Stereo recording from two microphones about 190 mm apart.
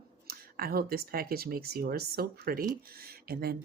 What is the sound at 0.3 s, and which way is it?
Speech, 50° right (ahead or behind).